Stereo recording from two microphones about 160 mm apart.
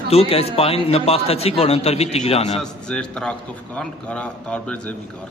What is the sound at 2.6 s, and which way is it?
A man's voice, 5° left (ahead or behind).